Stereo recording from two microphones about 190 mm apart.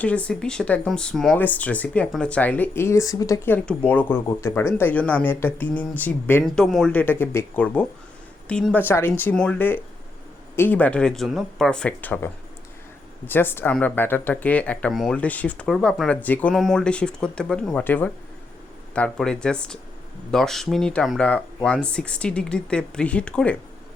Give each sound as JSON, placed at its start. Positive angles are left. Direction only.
{"t": 0.0, "sound": "speech", "side_deg": 5}